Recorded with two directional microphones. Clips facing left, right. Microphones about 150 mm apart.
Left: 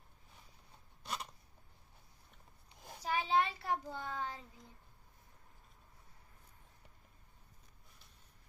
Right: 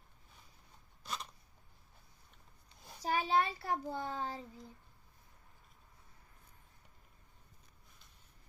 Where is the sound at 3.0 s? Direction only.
40° right (ahead or behind).